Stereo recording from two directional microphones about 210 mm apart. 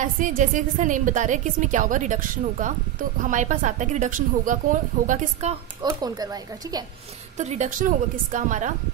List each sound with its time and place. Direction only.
0.0 s a woman's voice: 35° right (ahead or behind)
5.8 s speech: 20° right (ahead or behind)
7.3 s a woman's voice: 35° right (ahead or behind)